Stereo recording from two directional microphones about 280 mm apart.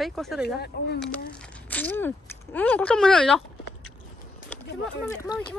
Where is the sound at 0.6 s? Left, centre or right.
Left.